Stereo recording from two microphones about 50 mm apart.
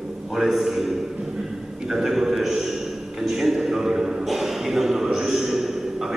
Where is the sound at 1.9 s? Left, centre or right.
Centre.